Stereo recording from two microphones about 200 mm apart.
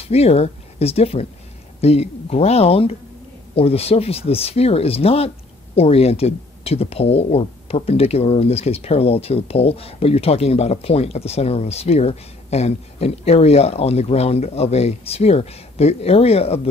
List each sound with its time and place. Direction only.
0.0 s speech: 30° left (ahead or behind)